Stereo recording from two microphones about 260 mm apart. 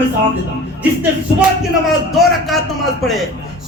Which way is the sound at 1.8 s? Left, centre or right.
Centre.